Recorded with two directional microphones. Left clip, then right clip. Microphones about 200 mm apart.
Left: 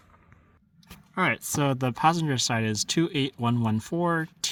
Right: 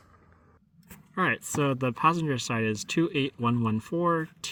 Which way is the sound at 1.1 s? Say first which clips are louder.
Left 1 dB; 40° left (ahead or behind).